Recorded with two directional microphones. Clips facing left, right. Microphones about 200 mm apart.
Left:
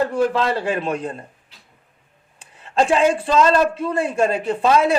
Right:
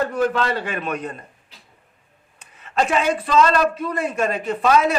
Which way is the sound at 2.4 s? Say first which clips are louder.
Left 3 dB; 30° left (ahead or behind).